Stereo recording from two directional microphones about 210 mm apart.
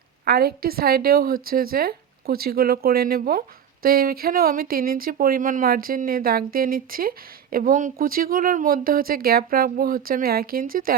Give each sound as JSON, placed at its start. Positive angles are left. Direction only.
{"t": 0.3, "sound": "speech", "side_deg": -45}